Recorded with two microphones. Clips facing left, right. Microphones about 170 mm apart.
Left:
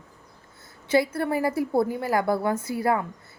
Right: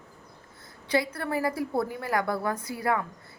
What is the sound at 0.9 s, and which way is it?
A woman's voice, 25° left (ahead or behind).